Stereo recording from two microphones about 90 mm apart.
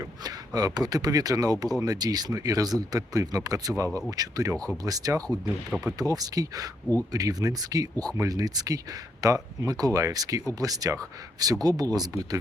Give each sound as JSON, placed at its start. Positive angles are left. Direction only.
{"t": 0.2, "sound": "speech", "side_deg": -45}